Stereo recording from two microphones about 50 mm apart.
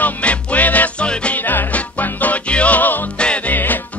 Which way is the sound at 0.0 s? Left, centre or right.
Left.